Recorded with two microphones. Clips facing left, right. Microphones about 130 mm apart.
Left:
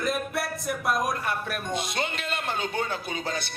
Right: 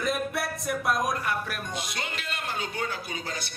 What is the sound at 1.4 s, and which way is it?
A man's voice, 25° left (ahead or behind).